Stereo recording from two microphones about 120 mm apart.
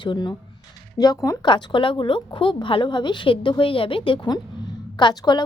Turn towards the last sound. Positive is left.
turn(degrees=40)  # may be behind; listen again after turning